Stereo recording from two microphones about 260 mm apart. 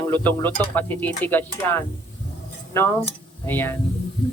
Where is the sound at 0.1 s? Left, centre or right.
Centre.